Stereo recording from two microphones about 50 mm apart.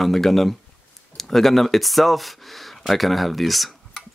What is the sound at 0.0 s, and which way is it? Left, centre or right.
Speech, centre.